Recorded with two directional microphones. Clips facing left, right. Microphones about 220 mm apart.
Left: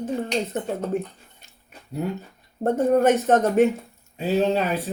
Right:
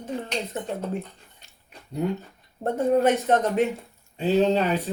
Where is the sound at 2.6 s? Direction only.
45° left (ahead or behind).